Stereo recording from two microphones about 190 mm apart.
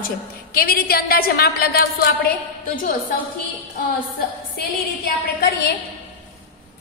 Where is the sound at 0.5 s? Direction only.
50° left (ahead or behind).